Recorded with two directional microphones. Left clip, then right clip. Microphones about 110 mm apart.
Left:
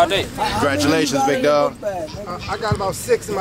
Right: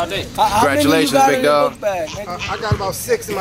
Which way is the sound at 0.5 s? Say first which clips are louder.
Right 2 dB; centre (ahead or behind).